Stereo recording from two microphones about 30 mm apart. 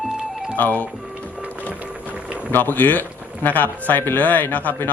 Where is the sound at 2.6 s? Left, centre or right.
Left.